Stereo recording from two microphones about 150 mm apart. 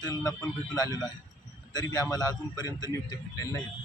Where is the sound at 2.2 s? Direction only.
25° left (ahead or behind).